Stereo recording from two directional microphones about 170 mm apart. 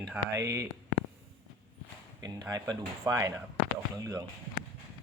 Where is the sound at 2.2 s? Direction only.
20° right (ahead or behind).